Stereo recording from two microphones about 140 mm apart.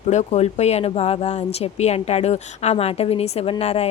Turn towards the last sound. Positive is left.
turn(degrees=45)  # may be behind; listen again after turning